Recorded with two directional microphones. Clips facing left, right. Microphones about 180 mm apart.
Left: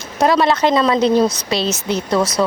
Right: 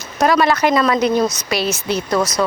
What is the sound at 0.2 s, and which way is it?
Speech, 25° left (ahead or behind).